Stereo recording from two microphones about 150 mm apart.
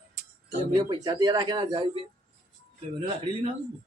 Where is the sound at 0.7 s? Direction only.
30° right (ahead or behind).